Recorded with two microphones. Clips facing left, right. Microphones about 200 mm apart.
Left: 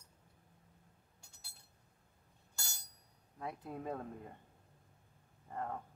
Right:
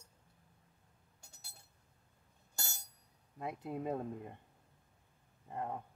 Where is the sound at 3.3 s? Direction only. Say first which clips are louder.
Right 3 dB; 20° right (ahead or behind).